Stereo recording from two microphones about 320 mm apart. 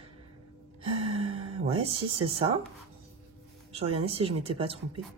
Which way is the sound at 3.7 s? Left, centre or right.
Centre.